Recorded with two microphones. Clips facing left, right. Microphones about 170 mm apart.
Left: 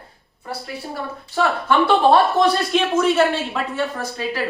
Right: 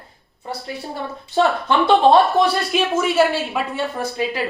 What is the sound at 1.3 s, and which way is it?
Speech, 20° right (ahead or behind).